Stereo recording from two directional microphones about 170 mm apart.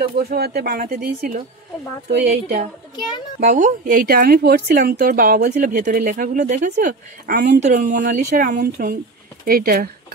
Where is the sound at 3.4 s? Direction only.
45° right (ahead or behind).